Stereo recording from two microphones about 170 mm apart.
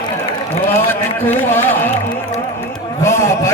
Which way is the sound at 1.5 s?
10° left (ahead or behind).